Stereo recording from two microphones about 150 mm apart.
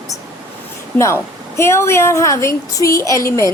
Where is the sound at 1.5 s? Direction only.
20° left (ahead or behind).